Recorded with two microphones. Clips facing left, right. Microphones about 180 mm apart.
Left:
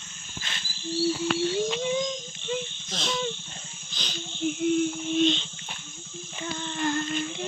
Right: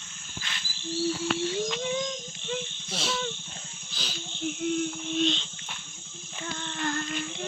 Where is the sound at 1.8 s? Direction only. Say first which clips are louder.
Left 3 dB; 10° left (ahead or behind).